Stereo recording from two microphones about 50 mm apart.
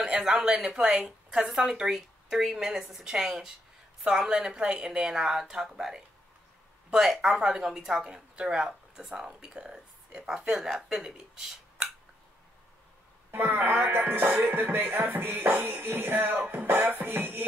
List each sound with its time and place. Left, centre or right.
0.0 s speech: centre
13.4 s music: right